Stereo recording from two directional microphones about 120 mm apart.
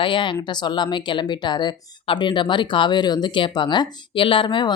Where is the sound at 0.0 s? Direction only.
45° left (ahead or behind).